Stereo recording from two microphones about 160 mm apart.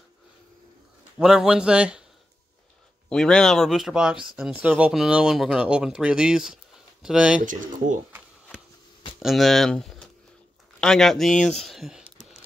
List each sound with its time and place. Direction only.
1.1 s speech: 5° right (ahead or behind)
3.1 s speech: 5° left (ahead or behind)
7.4 s speech: 55° right (ahead or behind)
9.2 s speech: centre (ahead or behind)